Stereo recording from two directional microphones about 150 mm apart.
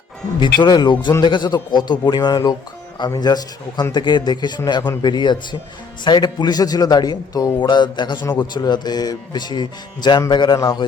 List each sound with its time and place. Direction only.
0.6 s speech: 30° left (ahead or behind)